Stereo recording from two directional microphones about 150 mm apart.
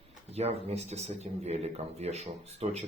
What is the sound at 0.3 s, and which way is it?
Speech, 45° right (ahead or behind).